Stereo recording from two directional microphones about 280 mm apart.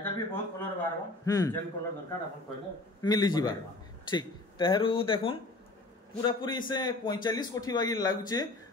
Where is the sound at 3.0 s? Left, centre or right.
Centre.